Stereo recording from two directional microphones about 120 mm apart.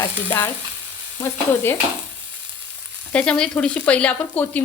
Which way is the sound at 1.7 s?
20° left (ahead or behind).